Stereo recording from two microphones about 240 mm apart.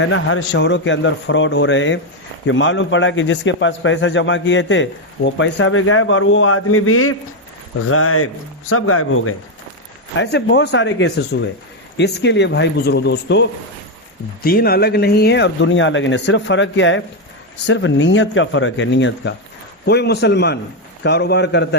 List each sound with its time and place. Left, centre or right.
0.0 s a man's voice: left
10.2 s a man's voice: left